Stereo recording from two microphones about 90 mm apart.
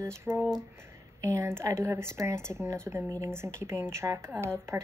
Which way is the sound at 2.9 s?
20° right (ahead or behind).